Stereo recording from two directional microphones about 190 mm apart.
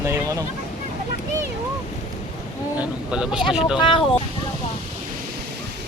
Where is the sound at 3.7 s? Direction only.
25° left (ahead or behind).